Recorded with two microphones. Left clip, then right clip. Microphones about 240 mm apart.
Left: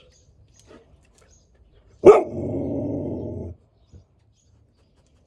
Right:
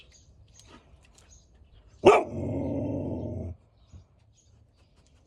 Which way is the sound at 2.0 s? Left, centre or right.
Centre.